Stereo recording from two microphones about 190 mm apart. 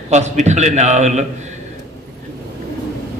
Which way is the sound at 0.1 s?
35° right (ahead or behind).